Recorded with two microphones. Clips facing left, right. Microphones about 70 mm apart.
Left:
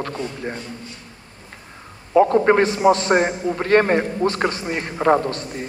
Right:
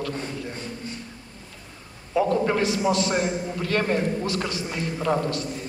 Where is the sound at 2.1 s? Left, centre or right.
Left.